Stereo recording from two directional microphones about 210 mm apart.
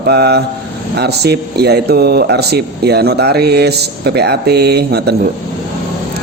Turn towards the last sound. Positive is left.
turn(degrees=-50)  # may be behind; listen again after turning